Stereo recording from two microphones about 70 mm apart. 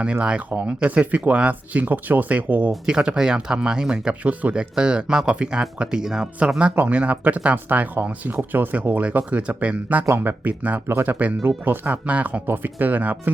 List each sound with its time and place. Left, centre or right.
0.5 s speech: centre
10.1 s speech: right